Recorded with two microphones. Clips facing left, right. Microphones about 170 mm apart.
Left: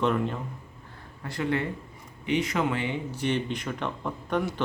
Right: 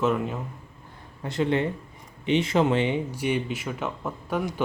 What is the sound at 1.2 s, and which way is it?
Speech, 20° right (ahead or behind).